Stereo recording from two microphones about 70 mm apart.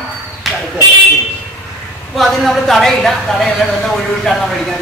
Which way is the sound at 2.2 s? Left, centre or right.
Centre.